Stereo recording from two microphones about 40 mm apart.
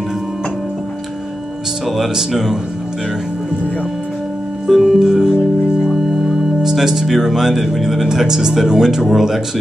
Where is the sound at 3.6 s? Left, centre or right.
Left.